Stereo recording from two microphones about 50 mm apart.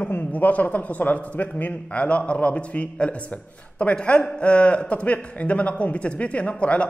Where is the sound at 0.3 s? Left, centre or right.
Left.